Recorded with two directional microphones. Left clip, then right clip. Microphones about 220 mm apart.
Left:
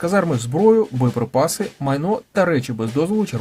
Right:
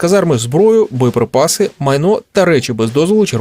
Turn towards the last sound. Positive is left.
turn(degrees=-40)  # may be behind; listen again after turning